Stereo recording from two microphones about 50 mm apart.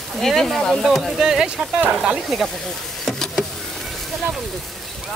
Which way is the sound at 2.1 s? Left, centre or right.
Centre.